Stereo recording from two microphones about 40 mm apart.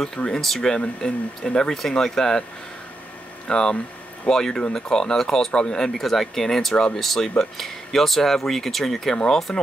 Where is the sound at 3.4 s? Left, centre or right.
Left.